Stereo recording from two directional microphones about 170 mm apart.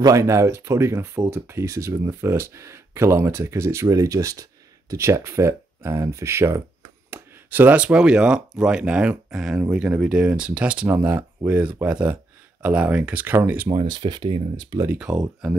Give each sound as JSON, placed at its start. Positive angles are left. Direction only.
{"t": 0.0, "sound": "speech", "side_deg": -20}
{"t": 13.7, "sound": "speech", "side_deg": -25}
{"t": 14.9, "sound": "speech", "side_deg": -5}